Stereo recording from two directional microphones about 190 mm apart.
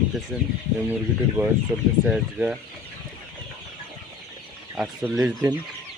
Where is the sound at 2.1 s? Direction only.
5° right (ahead or behind).